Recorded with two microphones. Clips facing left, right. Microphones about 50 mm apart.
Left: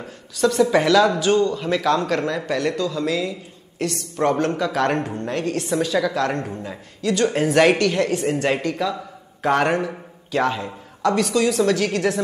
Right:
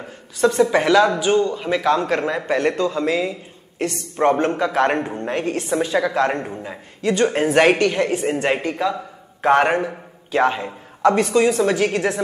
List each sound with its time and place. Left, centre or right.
0.4 s a man's voice: right